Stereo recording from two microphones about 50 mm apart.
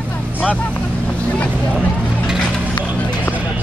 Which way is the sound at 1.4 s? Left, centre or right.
Left.